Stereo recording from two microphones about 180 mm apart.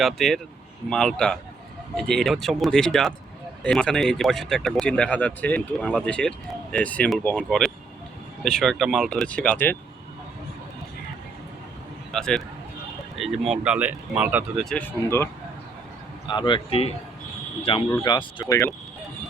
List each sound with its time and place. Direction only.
0.0 s speech: centre (ahead or behind)
12.1 s speech: 5° left (ahead or behind)
14.5 s speech: 5° left (ahead or behind)
16.2 s speech: 25° left (ahead or behind)